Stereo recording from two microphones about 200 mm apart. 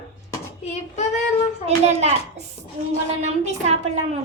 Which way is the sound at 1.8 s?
35° right (ahead or behind).